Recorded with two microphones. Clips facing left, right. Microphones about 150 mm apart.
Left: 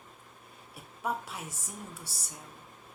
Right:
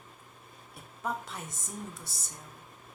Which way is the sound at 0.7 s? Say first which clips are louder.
Left 1 dB; 5° left (ahead or behind).